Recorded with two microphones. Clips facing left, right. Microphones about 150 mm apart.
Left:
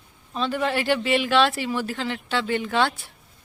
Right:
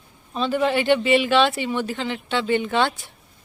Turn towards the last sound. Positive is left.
turn(degrees=0)  # may be behind; listen again after turning